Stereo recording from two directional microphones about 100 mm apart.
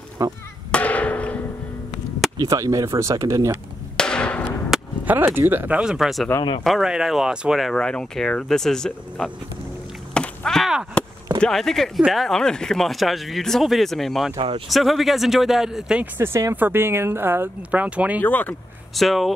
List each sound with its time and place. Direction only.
0.2 s speech: 35° right (ahead or behind)
0.7 s music: 15° left (ahead or behind)
2.3 s speech: 35° right (ahead or behind)
3.9 s music: 10° left (ahead or behind)
5.0 s speech: 20° right (ahead or behind)
5.8 s speech: 5° right (ahead or behind)
7.7 s speech: 10° left (ahead or behind)
10.1 s a sound: 5° left (ahead or behind)
11.4 s speech: 5° left (ahead or behind)
16.2 s speech: 30° right (ahead or behind)
18.2 s speech: 15° left (ahead or behind)
18.9 s speech: centre (ahead or behind)